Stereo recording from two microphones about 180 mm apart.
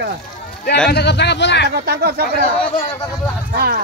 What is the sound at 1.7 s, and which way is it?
Speech, 65° right (ahead or behind).